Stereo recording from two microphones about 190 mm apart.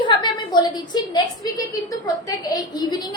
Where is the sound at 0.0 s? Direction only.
25° left (ahead or behind).